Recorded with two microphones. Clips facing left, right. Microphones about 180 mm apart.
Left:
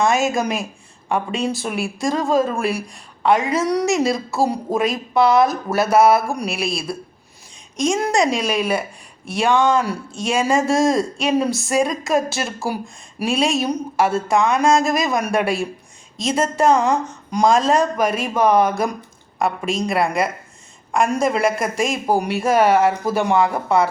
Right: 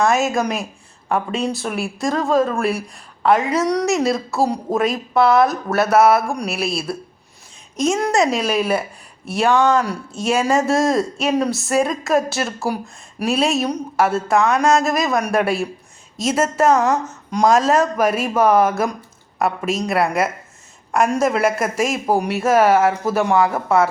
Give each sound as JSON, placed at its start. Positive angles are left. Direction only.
{"t": 0.0, "sound": "speech", "side_deg": 0}